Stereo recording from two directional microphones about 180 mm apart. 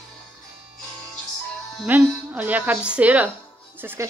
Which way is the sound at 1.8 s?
10° right (ahead or behind).